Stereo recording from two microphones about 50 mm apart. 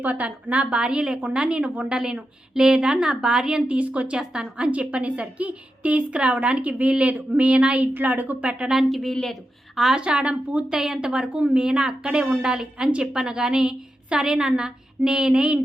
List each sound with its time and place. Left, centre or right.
0.0 s a woman's voice: right; by 3.6 s centre
3.7 s a woman's voice: right
7.9 s a woman's voice: right
8.4 s a woman's voice: right
8.7 s a woman's voice: centre
9.9 s a woman's voice: right
10.7 s a woman's voice: centre